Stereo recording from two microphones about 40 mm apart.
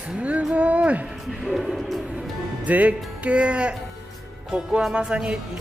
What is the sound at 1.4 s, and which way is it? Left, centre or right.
Music, centre.